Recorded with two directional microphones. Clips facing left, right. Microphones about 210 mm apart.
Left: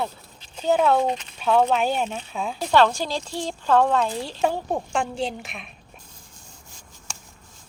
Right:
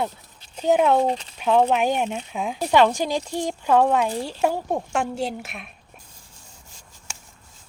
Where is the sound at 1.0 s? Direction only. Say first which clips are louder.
Right 2 dB; 30° right (ahead or behind).